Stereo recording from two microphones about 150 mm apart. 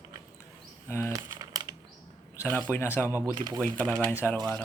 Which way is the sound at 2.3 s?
15° left (ahead or behind).